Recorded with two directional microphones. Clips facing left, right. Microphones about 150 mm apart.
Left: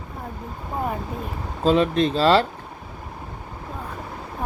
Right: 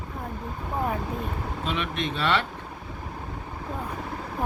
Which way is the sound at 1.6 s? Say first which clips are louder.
Left 12 dB; 35° left (ahead or behind).